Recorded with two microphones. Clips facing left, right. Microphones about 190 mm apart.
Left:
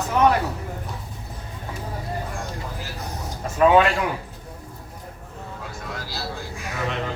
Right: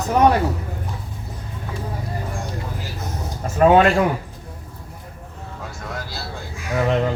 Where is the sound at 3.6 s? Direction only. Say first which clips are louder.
Right 2 dB; 40° right (ahead or behind).